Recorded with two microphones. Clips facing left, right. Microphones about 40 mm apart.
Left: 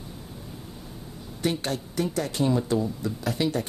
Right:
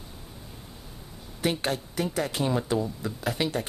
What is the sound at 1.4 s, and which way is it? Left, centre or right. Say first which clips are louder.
Speech: even; centre.